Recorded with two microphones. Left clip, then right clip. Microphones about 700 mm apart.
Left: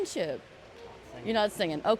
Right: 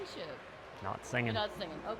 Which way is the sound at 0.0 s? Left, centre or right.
Left.